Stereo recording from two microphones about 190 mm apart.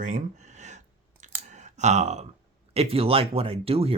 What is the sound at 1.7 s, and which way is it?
Speech, 35° right (ahead or behind).